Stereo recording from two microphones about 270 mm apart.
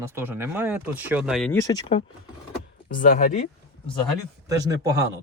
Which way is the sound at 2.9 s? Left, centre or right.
Left.